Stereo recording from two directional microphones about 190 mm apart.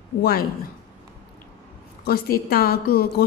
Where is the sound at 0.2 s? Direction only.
50° left (ahead or behind).